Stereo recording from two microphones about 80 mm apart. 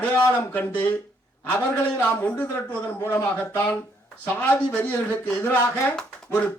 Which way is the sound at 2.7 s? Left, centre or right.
Left.